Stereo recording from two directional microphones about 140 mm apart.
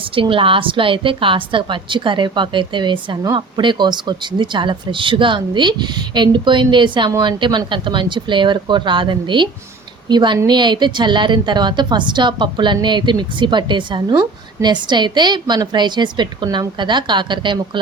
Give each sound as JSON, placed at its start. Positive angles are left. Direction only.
{"t": 0.2, "sound": "a woman's voice", "side_deg": -40}